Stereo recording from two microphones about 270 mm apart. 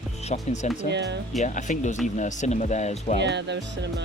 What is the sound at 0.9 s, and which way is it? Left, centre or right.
Speech, right.